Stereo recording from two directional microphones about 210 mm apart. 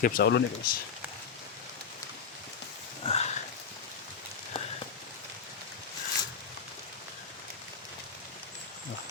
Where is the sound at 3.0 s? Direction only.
30° left (ahead or behind).